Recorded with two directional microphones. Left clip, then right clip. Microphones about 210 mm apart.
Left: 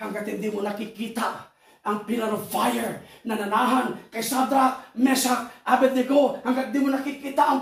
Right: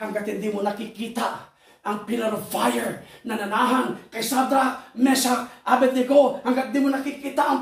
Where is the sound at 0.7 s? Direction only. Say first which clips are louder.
Right 1 dB; 15° right (ahead or behind).